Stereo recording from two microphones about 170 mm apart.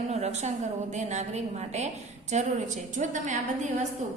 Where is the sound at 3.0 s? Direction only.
45° right (ahead or behind).